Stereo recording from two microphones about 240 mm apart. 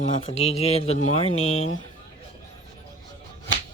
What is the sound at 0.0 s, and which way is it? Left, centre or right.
Speech, left.